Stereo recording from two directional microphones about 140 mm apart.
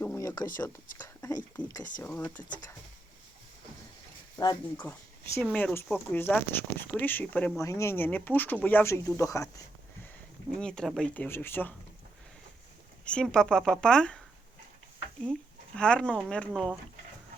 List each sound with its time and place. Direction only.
0.0 s a sound: 20° left (ahead or behind)
1.6 s speech: 20° left (ahead or behind)
4.8 s speech: 15° left (ahead or behind)
10.6 s speech: 5° left (ahead or behind)
13.1 s speech: 5° left (ahead or behind)
15.2 s speech: 5° left (ahead or behind)